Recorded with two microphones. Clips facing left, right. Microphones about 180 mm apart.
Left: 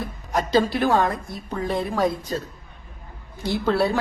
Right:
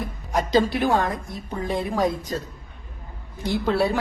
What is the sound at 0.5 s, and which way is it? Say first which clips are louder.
Speech: left 1 dB; 15° right (ahead or behind).